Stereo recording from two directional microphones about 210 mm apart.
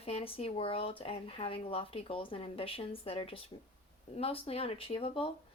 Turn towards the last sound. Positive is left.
turn(degrees=25)  # may be behind; listen again after turning